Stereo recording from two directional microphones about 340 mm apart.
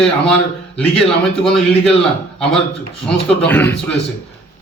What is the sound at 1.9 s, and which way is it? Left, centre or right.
A man's voice, centre.